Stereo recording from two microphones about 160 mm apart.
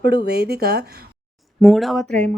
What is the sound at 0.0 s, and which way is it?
Speech, 90° right.